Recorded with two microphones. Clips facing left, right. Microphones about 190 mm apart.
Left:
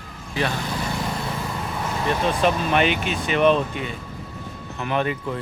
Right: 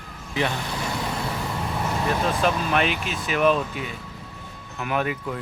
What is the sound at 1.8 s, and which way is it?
Speech, centre (ahead or behind).